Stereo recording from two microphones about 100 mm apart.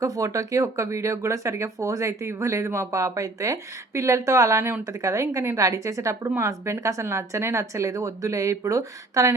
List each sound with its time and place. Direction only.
0.0 s speech: 35° right (ahead or behind)